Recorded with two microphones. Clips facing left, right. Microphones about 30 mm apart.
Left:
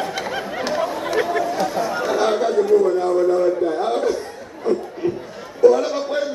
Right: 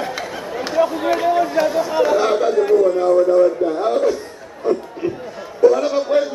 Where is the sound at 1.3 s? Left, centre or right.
Centre.